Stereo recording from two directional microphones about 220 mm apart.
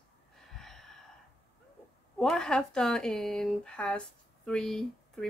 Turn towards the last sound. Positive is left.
turn(degrees=0)  # may be behind; listen again after turning